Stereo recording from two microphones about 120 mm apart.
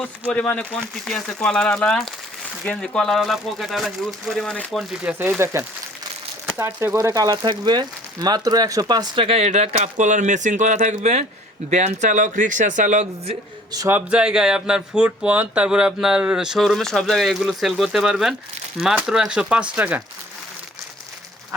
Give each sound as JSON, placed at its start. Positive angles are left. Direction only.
{"t": 0.0, "sound": "speech", "side_deg": 10}
{"t": 4.8, "sound": "speech", "side_deg": -5}
{"t": 5.4, "sound": "speech", "side_deg": -25}
{"t": 9.2, "sound": "speech", "side_deg": -60}
{"t": 13.8, "sound": "speech", "side_deg": -15}